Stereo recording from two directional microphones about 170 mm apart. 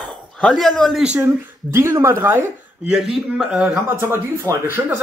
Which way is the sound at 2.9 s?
5° right (ahead or behind).